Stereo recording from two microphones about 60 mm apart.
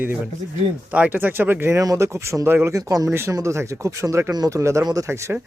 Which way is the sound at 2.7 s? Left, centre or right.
Right.